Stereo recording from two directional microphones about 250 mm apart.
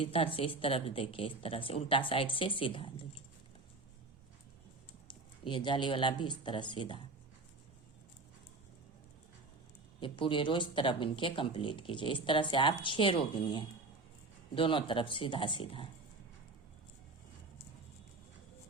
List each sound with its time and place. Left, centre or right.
0.0 s a woman's voice: left
5.0 s speech: centre
10.0 s a woman's voice: centre